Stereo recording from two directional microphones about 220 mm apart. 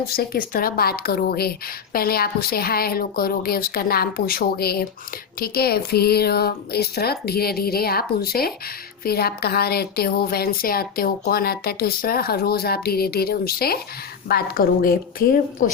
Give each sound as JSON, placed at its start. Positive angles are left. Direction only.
{"t": 0.1, "sound": "speech", "side_deg": 45}